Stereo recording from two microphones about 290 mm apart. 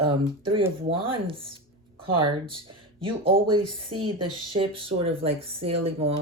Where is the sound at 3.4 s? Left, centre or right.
Centre.